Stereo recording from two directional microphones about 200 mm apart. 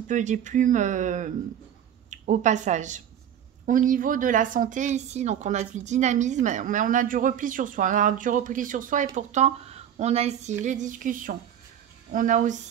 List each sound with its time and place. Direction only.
0.1 s a woman's voice: 40° right (ahead or behind)